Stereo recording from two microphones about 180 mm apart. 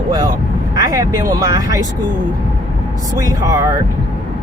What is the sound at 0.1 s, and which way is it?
Vehicle, 20° right (ahead or behind).